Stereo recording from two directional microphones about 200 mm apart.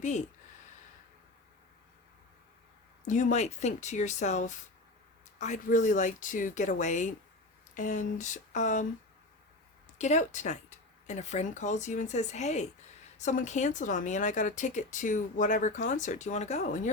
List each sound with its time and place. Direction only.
3.1 s speech: 40° left (ahead or behind)
10.0 s speech: 35° left (ahead or behind)